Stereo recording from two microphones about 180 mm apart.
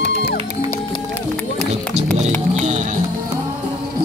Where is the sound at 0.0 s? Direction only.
70° left (ahead or behind).